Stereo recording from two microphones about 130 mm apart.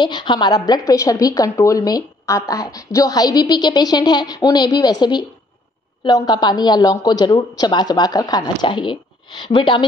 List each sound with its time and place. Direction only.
0.0 s a woman's voice: 35° left (ahead or behind)